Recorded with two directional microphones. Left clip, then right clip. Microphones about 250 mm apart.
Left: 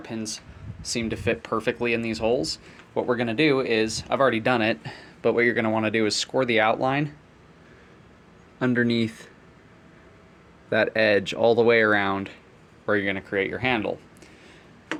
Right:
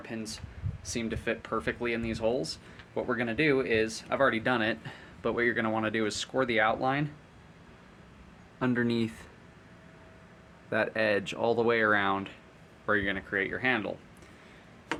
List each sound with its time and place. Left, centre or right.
0.0 s speech: left
8.5 s speech: centre
10.7 s speech: centre